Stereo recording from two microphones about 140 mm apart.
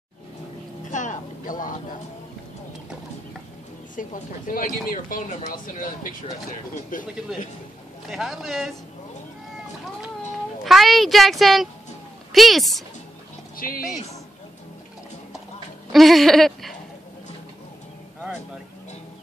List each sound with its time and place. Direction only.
0.8 s a sound: 65° left (ahead or behind)
3.9 s speech: 70° left (ahead or behind)
6.9 s speech: 70° left (ahead or behind)
8.1 s a woman's voice: centre (ahead or behind)
10.6 s a woman's voice: centre (ahead or behind)
13.6 s speech: 90° left
15.9 s a woman's voice: centre (ahead or behind)